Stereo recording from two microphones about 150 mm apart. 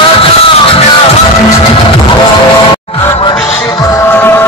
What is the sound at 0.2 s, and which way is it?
Music, 40° left (ahead or behind).